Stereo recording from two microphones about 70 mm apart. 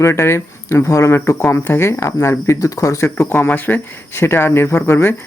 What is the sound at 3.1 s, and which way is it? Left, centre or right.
Speech, left.